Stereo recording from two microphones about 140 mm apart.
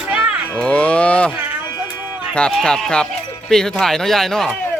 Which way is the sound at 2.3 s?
5° left (ahead or behind).